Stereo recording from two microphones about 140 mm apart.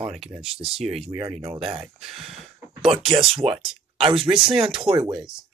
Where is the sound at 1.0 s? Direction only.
40° right (ahead or behind).